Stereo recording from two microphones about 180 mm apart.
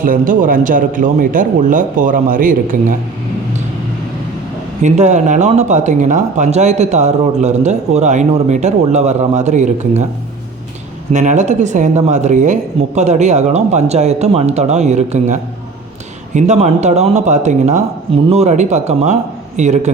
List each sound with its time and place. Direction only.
0.0 s a man's voice: 50° right (ahead or behind)
4.8 s speech: 40° right (ahead or behind)
11.1 s speech: 40° right (ahead or behind)